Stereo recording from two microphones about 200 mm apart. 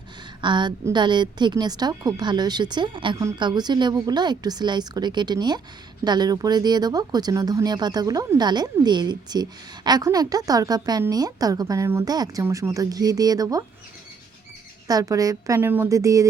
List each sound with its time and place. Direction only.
0.4 s speech: 20° right (ahead or behind)
14.8 s a woman's voice: 15° right (ahead or behind)